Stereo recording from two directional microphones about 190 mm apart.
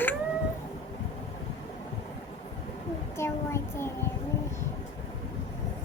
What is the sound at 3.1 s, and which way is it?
Child singing, 15° left (ahead or behind).